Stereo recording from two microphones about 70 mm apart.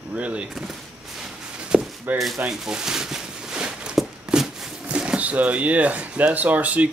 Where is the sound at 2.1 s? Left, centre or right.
Right.